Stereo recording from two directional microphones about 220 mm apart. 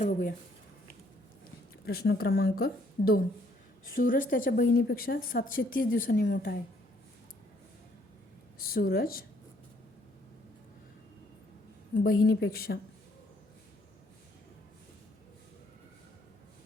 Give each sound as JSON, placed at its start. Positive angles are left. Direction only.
{"t": 0.0, "sound": "a woman's voice", "side_deg": 35}
{"t": 1.8, "sound": "a woman's voice", "side_deg": 45}
{"t": 6.2, "sound": "speech", "side_deg": 50}
{"t": 8.6, "sound": "speech", "side_deg": 45}
{"t": 11.9, "sound": "speech", "side_deg": 40}